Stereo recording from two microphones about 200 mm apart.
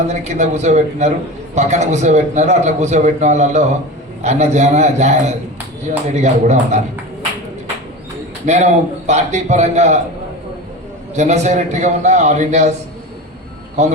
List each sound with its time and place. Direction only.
0.1 s a man's voice: 35° right (ahead or behind)
8.4 s a man's voice: 35° right (ahead or behind)
11.2 s a man's voice: 35° right (ahead or behind)